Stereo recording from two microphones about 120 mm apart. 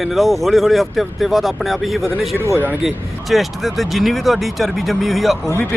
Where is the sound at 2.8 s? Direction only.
Centre (ahead or behind).